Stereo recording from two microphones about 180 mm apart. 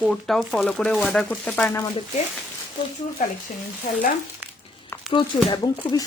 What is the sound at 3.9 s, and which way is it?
Speech, 40° left (ahead or behind).